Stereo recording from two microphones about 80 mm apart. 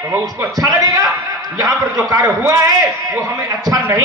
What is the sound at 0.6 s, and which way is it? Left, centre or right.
A man's voice, right.